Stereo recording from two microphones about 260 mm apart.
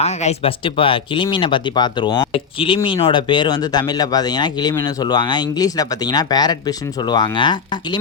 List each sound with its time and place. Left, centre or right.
0.0 s speech: left